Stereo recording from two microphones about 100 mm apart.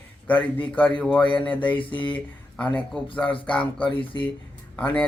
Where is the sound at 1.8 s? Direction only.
55° left (ahead or behind).